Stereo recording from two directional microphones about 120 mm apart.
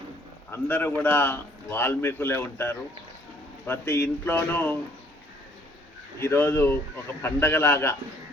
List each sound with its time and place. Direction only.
0.5 s a man's voice: 15° left (ahead or behind)
6.1 s speech: 20° left (ahead or behind)